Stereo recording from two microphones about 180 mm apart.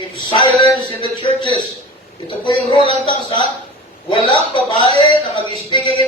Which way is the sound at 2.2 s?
25° left (ahead or behind).